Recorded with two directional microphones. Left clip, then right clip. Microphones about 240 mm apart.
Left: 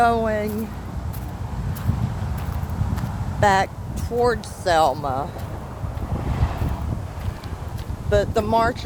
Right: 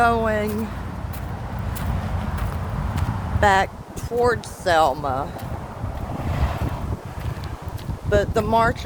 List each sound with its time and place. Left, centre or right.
0.0 s speech: centre
3.4 s speech: centre
6.2 s boat: right
8.1 s speech: centre